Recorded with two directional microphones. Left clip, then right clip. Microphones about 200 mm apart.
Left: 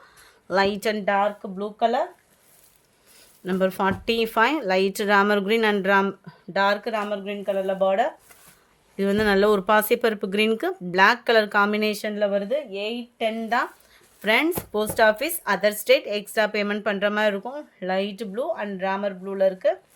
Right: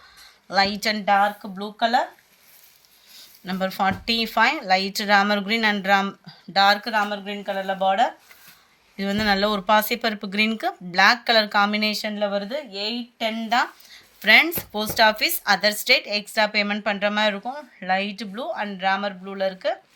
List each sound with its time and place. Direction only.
0.4 s speech: 60° left (ahead or behind)
3.4 s speech: 55° left (ahead or behind)
9.0 s speech: 55° left (ahead or behind)
14.2 s speech: 45° left (ahead or behind)